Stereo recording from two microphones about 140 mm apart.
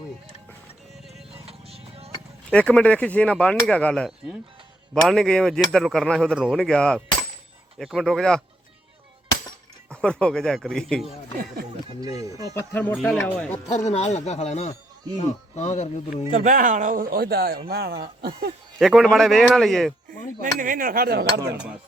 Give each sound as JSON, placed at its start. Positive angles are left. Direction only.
{"t": 1.5, "sound": "music", "side_deg": -45}
{"t": 2.5, "sound": "speech", "side_deg": 10}
{"t": 9.9, "sound": "speech", "side_deg": 5}
{"t": 12.0, "sound": "speech", "side_deg": -25}
{"t": 12.5, "sound": "speech", "side_deg": 10}
{"t": 13.0, "sound": "speech", "side_deg": 0}
{"t": 13.7, "sound": "speech", "side_deg": 50}
{"t": 16.3, "sound": "speech", "side_deg": -70}
{"t": 18.8, "sound": "speech", "side_deg": 0}
{"t": 20.4, "sound": "speech", "side_deg": -75}